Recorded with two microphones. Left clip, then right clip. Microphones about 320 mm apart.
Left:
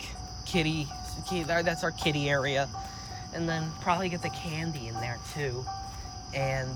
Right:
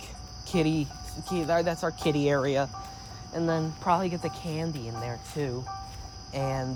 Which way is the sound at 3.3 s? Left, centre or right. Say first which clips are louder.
Right 5 dB; centre.